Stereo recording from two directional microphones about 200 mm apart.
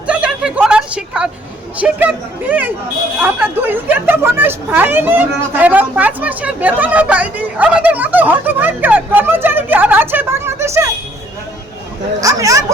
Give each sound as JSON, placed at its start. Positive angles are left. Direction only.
{"t": 0.1, "sound": "a sound", "side_deg": -5}
{"t": 1.8, "sound": "a woman's voice", "side_deg": -10}
{"t": 12.2, "sound": "speech", "side_deg": -15}